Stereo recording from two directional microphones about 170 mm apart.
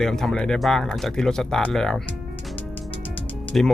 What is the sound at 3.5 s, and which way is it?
Speech, centre (ahead or behind).